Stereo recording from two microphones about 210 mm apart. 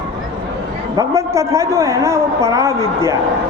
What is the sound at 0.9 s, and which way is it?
A man's voice, 15° right (ahead or behind).